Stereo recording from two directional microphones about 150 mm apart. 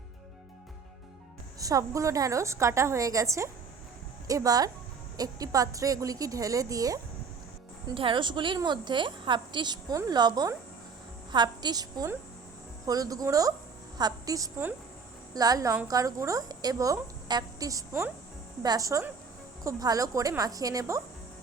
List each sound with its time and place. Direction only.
1.5 s a woman's voice: 25° right (ahead or behind)
7.9 s a woman's voice: 35° right (ahead or behind)